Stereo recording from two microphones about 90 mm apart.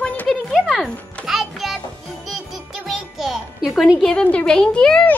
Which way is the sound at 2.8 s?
Centre (ahead or behind).